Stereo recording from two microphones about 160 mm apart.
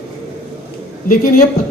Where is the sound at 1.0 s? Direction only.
60° left (ahead or behind).